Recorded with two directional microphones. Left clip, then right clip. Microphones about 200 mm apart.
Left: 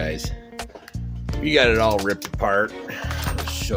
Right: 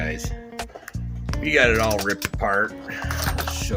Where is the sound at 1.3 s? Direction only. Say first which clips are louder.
Left 1 dB; 30° left (ahead or behind).